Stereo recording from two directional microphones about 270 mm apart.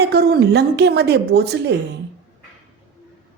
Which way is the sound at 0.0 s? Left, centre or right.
Right.